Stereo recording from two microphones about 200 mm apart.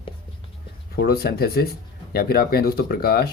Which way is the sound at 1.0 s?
50° left (ahead or behind).